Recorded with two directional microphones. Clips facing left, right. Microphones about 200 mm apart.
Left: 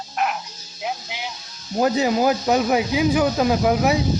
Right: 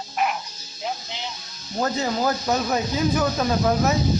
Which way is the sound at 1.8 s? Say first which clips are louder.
Left 5 dB; 15° left (ahead or behind).